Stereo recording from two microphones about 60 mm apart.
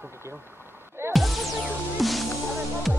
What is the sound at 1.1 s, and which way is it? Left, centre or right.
Music, centre.